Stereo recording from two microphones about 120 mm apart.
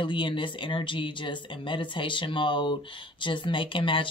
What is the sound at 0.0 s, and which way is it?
Speech, 45° left (ahead or behind).